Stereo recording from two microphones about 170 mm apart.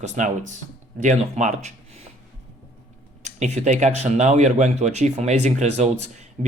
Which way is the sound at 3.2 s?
40° right (ahead or behind).